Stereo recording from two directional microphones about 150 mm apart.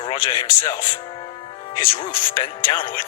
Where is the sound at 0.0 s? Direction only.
30° left (ahead or behind).